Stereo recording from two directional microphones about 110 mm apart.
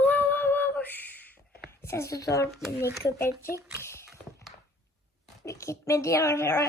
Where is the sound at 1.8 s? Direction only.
25° left (ahead or behind).